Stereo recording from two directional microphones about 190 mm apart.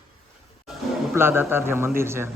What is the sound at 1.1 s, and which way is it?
Speech, 10° right (ahead or behind).